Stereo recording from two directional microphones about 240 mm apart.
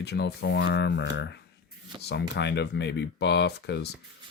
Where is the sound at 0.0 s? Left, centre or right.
Left.